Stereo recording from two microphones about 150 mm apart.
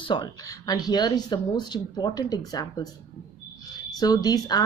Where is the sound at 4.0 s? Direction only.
25° left (ahead or behind).